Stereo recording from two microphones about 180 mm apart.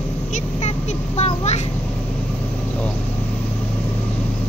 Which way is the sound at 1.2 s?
35° left (ahead or behind).